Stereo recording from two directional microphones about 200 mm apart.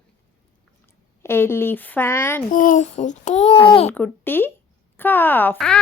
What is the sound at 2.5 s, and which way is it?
Speech, 40° left (ahead or behind).